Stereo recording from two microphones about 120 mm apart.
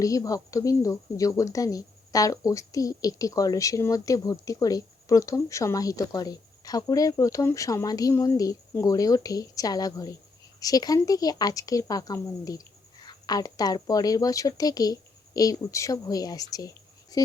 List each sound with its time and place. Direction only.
0.0 s speech: 30° left (ahead or behind)